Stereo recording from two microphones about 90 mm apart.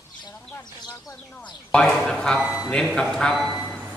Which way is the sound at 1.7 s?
10° left (ahead or behind).